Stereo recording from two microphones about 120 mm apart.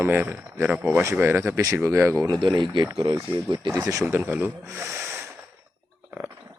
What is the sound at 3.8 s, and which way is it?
Speech, 30° right (ahead or behind).